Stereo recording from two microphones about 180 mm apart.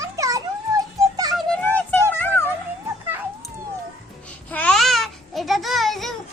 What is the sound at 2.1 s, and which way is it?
Music, 10° left (ahead or behind).